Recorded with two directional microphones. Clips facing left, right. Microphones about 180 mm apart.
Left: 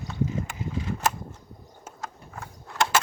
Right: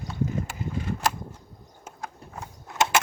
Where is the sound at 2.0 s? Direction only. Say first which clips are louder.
Right 1 dB; 15° right (ahead or behind).